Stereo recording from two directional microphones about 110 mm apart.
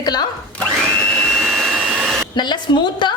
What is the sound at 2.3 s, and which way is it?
Speech, 45° left (ahead or behind).